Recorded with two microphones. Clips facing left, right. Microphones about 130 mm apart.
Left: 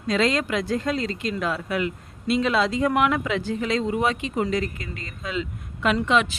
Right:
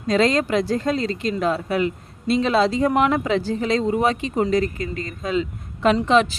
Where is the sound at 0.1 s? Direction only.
35° right (ahead or behind).